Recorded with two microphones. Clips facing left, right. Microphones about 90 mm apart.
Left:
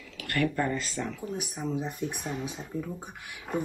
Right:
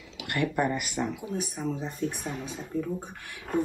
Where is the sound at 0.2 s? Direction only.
20° right (ahead or behind).